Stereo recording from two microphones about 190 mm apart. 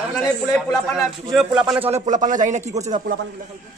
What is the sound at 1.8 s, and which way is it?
A man's voice, 35° right (ahead or behind).